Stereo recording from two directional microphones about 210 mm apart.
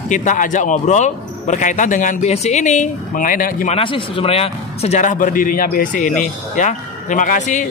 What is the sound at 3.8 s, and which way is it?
Speech, 25° left (ahead or behind).